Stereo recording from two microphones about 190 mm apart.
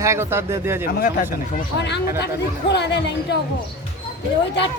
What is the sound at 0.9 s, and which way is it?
Speech, 50° left (ahead or behind).